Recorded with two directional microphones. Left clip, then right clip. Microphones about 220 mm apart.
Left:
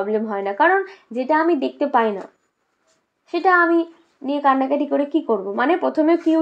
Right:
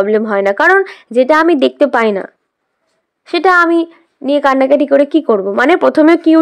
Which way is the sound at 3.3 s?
45° right (ahead or behind).